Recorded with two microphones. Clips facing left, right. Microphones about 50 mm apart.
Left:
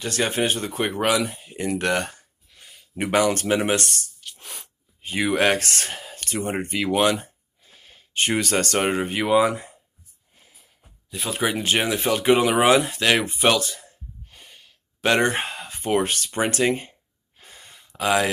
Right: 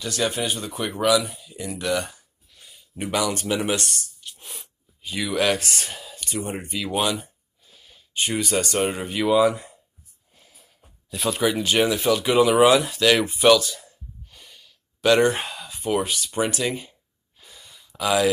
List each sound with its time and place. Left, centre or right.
0.0 s speech: left
1.3 s a sound: left
3.4 s speech: left
5.0 s speech: left
5.7 s speech: left
11.2 s speech: left
13.8 s gasp: left
17.4 s a sound: left